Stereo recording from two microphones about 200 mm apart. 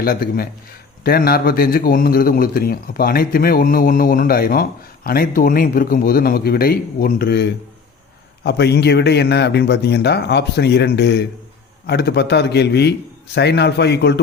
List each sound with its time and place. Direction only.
0.0 s a man's voice: 50° left (ahead or behind)